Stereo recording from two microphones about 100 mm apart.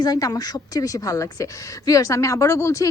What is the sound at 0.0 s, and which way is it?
A woman's voice, 40° left (ahead or behind).